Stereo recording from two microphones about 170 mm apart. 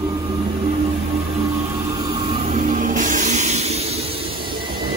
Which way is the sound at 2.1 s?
35° right (ahead or behind).